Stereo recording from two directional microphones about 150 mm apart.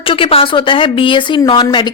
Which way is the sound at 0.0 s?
35° left (ahead or behind).